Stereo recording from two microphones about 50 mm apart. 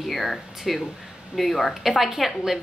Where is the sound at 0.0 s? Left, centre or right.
Centre.